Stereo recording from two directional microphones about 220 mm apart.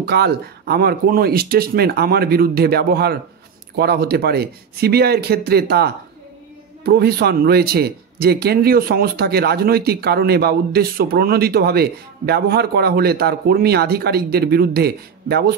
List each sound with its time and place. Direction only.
0.0 s a man's voice: 45° right (ahead or behind)